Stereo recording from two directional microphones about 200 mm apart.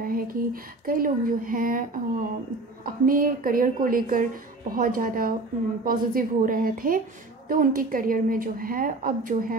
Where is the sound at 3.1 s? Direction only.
45° right (ahead or behind).